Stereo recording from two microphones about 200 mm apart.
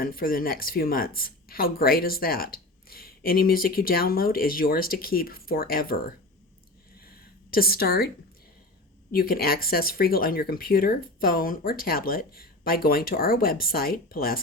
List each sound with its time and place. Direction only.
0.0 s speech: 45° left (ahead or behind)
7.5 s speech: 50° left (ahead or behind)
9.1 s speech: 45° left (ahead or behind)